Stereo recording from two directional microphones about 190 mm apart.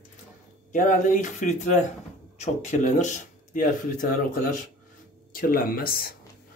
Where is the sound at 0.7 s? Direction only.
45° left (ahead or behind).